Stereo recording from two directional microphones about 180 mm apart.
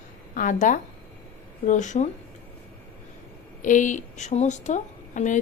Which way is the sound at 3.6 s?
45° left (ahead or behind).